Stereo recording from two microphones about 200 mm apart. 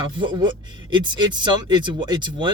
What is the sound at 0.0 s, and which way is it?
Speech, 25° right (ahead or behind).